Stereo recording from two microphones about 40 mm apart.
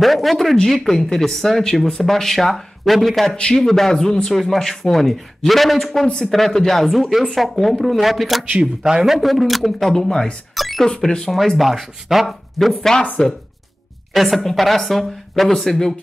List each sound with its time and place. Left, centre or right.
0.0 s speech: centre
3.3 s speech: centre
6.0 s speech: left
6.3 s speech: centre
10.5 s cash register: centre
11.0 s speech: centre
11.5 s speech: centre
12.7 s speech: centre
14.1 s speech: centre